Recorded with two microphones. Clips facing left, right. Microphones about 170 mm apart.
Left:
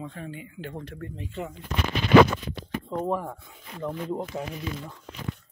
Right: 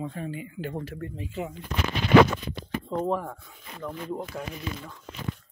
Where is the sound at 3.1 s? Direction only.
15° left (ahead or behind).